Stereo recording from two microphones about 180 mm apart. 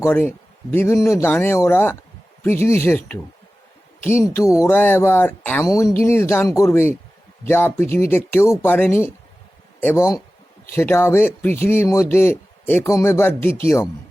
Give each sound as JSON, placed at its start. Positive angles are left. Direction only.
{"t": 0.0, "sound": "a man's voice", "side_deg": 10}